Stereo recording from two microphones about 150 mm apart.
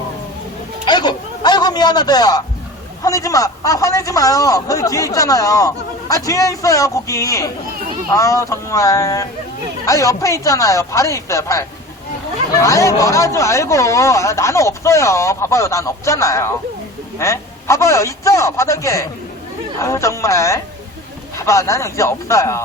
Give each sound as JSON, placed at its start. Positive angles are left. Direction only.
{"t": 0.9, "sound": "music", "side_deg": 30}
{"t": 3.0, "sound": "a man's voice", "side_deg": 20}